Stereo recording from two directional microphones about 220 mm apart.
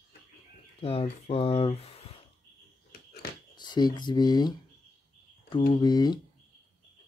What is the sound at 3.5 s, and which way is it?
Speech, 20° left (ahead or behind).